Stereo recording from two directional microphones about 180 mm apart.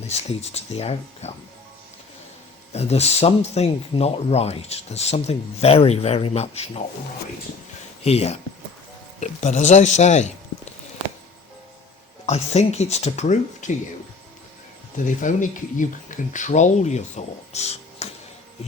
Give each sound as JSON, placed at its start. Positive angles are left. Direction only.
{"t": 0.1, "sound": "speech", "side_deg": 35}
{"t": 2.7, "sound": "speech", "side_deg": 35}
{"t": 8.0, "sound": "speech", "side_deg": 35}
{"t": 12.2, "sound": "speech", "side_deg": 40}
{"t": 14.9, "sound": "speech", "side_deg": 45}